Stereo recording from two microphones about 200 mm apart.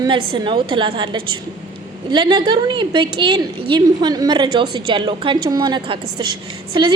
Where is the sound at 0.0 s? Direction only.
25° right (ahead or behind).